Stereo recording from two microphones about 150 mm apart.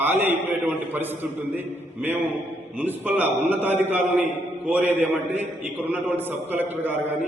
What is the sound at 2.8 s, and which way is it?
Speech, 10° right (ahead or behind).